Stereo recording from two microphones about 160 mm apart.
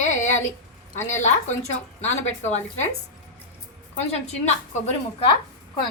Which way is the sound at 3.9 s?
45° left (ahead or behind).